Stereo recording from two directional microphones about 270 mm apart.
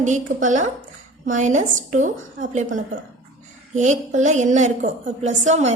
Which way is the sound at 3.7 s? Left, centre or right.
Right.